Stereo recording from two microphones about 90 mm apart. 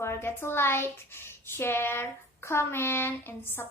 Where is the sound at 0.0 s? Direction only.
30° left (ahead or behind).